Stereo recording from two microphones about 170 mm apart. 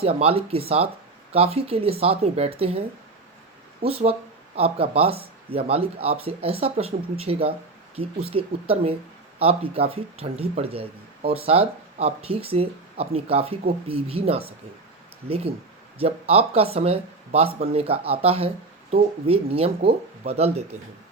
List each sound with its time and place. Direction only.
0.0 s speech: 35° right (ahead or behind)
3.8 s speech: 35° right (ahead or behind)
16.0 s speech: 35° right (ahead or behind)